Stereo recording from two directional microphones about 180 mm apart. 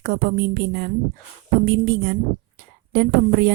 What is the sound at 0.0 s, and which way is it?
A woman's voice, 55° right (ahead or behind).